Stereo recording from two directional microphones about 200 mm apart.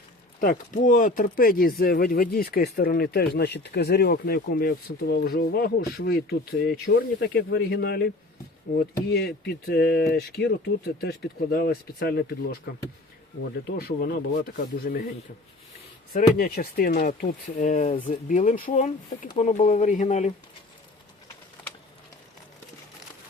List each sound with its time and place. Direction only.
0.3 s speech: 45° left (ahead or behind)
13.7 s speech: 50° left (ahead or behind)
16.1 s speech: 45° left (ahead or behind)